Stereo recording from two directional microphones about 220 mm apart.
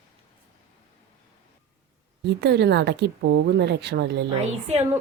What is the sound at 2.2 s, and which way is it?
A woman's voice, 50° right (ahead or behind).